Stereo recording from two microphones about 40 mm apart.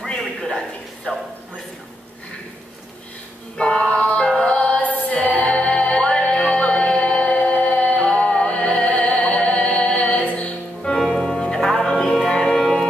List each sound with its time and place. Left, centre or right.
0.4 s a sound: centre
3.5 s music: left
4.4 s a capella: left
11.0 s music: centre